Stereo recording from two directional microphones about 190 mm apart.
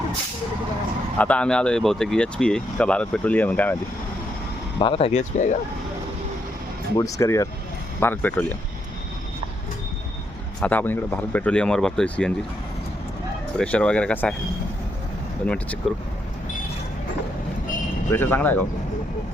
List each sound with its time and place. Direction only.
1.2 s speech: 5° left (ahead or behind)
4.8 s speech: 30° left (ahead or behind)
6.9 s speech: 15° left (ahead or behind)
10.6 s speech: 10° left (ahead or behind)
13.6 s speech: 5° left (ahead or behind)
15.4 s speech: 5° left (ahead or behind)
18.1 s speech: 10° left (ahead or behind)